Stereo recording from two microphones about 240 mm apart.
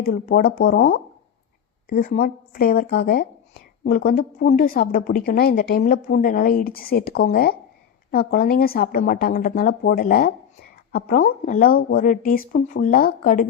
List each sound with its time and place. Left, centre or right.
0.0 s a woman's voice: left